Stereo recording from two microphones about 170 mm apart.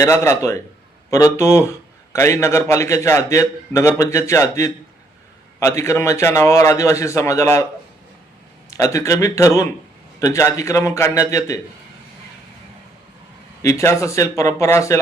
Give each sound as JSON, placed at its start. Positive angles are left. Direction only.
{"t": 0.0, "sound": "a man's voice", "side_deg": 15}
{"t": 8.7, "sound": "a man's voice", "side_deg": 20}
{"t": 13.6, "sound": "a man's voice", "side_deg": 20}